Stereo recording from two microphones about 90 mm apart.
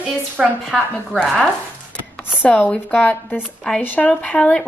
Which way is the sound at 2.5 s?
20° left (ahead or behind).